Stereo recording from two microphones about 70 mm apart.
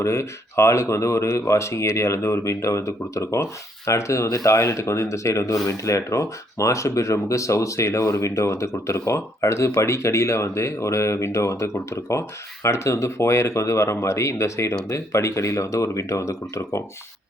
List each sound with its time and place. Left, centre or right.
0.0 s speech: left